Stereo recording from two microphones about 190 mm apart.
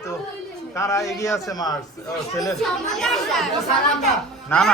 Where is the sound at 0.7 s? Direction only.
15° left (ahead or behind).